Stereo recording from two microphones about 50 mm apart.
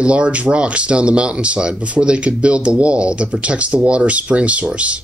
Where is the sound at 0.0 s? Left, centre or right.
Right.